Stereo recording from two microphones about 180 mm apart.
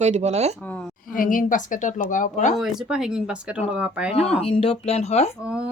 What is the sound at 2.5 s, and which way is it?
Speech, centre (ahead or behind).